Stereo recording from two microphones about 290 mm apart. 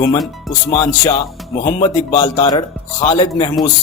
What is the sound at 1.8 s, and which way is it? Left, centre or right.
A man's voice, centre.